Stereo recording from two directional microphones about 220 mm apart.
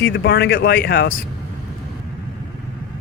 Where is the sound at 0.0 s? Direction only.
45° left (ahead or behind).